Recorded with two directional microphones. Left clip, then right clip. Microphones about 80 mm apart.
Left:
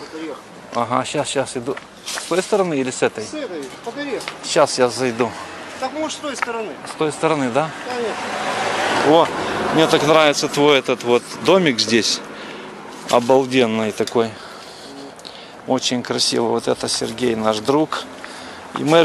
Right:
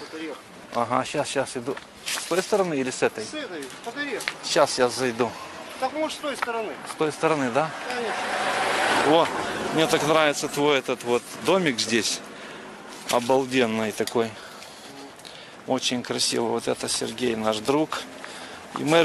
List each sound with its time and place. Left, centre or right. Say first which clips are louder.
0.7 s speech: left 5 dB; right
4.5 s speech: left 5 dB; centre
9.8 s speech: left 7 dB; centre
13.3 s speech: left 5 dB; centre
15.7 s a man's voice: left 6 dB; centre